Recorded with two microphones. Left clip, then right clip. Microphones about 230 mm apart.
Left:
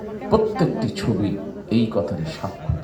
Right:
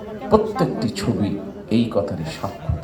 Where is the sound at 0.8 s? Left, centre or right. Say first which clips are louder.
Even; right.